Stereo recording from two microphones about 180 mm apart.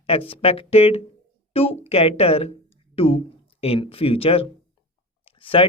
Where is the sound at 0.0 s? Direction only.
30° left (ahead or behind).